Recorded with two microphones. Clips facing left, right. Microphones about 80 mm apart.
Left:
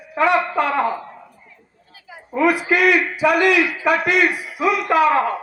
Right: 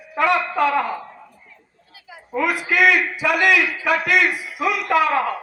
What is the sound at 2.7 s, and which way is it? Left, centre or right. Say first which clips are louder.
A man's voice: left 1 dB; left.